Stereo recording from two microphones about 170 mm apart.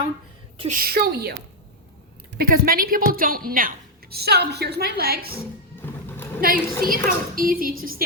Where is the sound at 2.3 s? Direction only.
60° right (ahead or behind).